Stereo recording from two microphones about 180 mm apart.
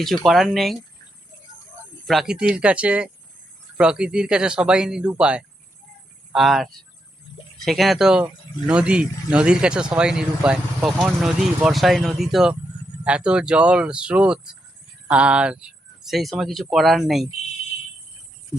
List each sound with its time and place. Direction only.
0.3 s speech: centre (ahead or behind)
2.0 s speech: centre (ahead or behind)
7.3 s a sound: 25° left (ahead or behind)
7.6 s speech: centre (ahead or behind)